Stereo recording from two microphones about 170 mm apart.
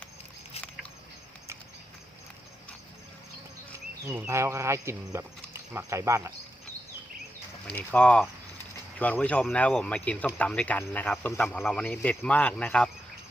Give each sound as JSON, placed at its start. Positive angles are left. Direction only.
{"t": 4.1, "sound": "speech", "side_deg": -15}
{"t": 7.7, "sound": "speech", "side_deg": 10}